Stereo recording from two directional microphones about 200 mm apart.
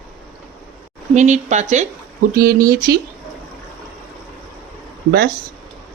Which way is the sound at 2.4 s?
50° right (ahead or behind).